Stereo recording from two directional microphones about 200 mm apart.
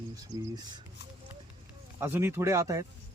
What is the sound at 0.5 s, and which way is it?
Speech, 20° right (ahead or behind).